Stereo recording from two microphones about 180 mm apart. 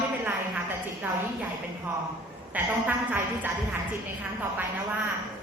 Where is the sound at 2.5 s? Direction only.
10° right (ahead or behind).